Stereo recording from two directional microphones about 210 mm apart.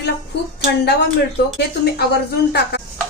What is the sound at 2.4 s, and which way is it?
Speech, 50° left (ahead or behind).